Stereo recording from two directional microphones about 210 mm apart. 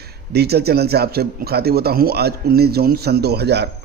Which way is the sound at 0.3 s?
50° right (ahead or behind).